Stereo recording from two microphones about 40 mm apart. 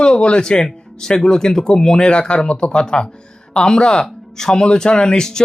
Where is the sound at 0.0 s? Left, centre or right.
Left.